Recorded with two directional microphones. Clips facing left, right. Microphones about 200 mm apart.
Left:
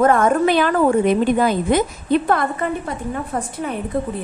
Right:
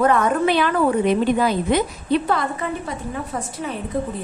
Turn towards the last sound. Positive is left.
turn(degrees=55)  # may be behind; listen again after turning